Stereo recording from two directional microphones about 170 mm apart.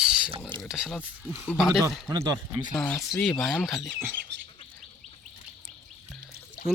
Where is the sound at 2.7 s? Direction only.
5° left (ahead or behind).